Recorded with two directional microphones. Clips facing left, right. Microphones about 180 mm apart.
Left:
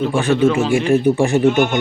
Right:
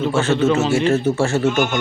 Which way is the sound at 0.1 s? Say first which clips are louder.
Left 1 dB; 15° left (ahead or behind).